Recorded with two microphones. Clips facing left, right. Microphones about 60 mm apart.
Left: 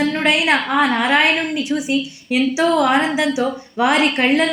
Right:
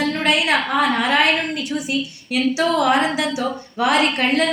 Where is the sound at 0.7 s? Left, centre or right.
Left.